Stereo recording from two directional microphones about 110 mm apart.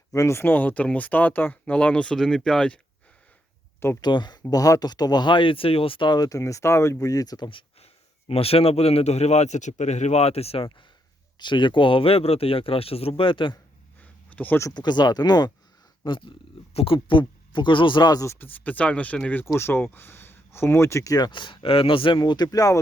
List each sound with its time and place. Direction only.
0.1 s speech: 25° left (ahead or behind); by 2.8 s 10° left (ahead or behind)
4.0 s speech: 40° left (ahead or behind)
8.3 s a man's voice: 65° left (ahead or behind)
11.3 s speech: 45° left (ahead or behind)
14.0 s a sound: 15° left (ahead or behind)
14.7 s speech: 40° left (ahead or behind)
18.3 s speech: 20° left (ahead or behind)
21.2 s speech: 45° left (ahead or behind)
22.2 s speech: 35° left (ahead or behind)